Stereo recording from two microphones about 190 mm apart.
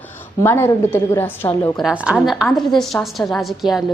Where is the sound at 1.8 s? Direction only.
5° right (ahead or behind).